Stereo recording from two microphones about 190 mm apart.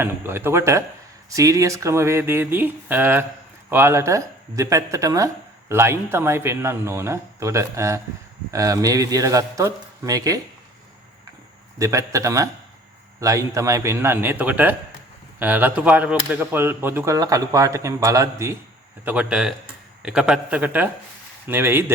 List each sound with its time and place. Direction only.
0.0 s speech: 10° right (ahead or behind)
11.8 s a man's voice: 15° right (ahead or behind)